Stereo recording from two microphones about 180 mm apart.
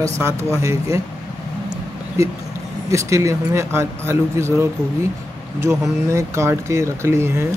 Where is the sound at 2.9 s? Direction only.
15° right (ahead or behind).